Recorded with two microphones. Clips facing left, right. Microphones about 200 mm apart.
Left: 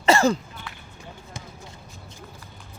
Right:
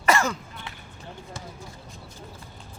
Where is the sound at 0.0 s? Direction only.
30° left (ahead or behind).